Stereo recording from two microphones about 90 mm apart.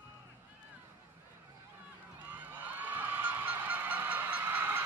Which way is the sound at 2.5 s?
20° right (ahead or behind).